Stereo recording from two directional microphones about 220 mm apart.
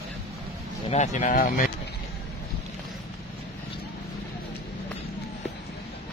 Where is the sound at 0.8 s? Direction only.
30° left (ahead or behind).